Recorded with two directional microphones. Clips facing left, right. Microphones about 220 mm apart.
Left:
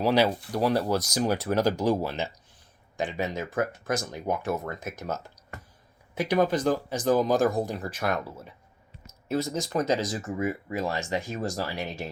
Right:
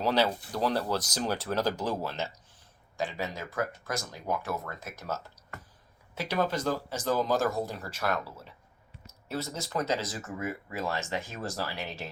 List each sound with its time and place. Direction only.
0.0 s speech: 10° left (ahead or behind)